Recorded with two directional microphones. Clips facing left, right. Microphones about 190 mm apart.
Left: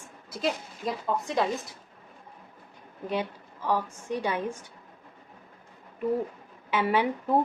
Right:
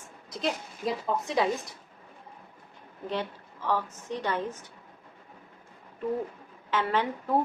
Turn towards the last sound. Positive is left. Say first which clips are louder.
# left 3 dB
turn(degrees=10)  # may be behind; listen again after turning